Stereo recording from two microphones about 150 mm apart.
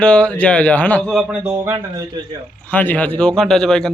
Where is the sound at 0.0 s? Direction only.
5° left (ahead or behind).